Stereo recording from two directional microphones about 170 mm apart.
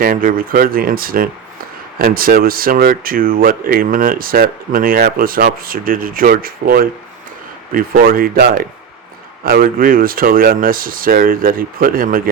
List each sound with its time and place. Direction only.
0.0 s speech: 55° right (ahead or behind)